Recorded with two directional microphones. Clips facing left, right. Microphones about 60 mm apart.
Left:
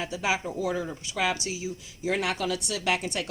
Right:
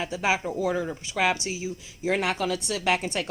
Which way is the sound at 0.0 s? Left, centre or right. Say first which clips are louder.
Right 2 dB; right.